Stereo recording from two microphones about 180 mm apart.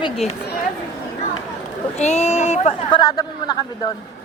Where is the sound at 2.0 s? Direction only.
40° left (ahead or behind).